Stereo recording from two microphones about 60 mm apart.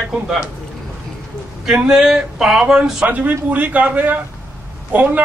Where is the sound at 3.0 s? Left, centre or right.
Right.